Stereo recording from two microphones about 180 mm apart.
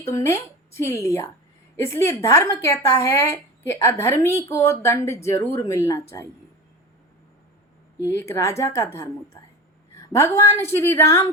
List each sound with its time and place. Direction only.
0.0 s speech: 15° left (ahead or behind)
8.0 s speech: 15° left (ahead or behind)